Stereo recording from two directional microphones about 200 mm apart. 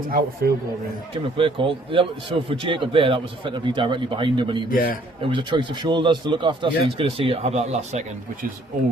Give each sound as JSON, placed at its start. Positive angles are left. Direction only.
{"t": 0.1, "sound": "a man's voice", "side_deg": -50}
{"t": 1.1, "sound": "a man's voice", "side_deg": -25}
{"t": 4.7, "sound": "a man's voice", "side_deg": 45}
{"t": 5.2, "sound": "a man's voice", "side_deg": -25}